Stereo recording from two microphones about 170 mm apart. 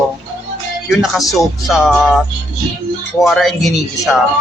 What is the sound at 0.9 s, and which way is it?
Speech, centre (ahead or behind).